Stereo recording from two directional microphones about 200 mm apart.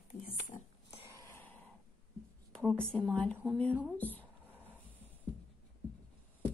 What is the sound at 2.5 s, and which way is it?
Speech, 5° left (ahead or behind).